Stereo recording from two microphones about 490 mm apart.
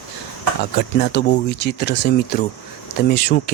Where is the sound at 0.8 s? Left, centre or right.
Centre.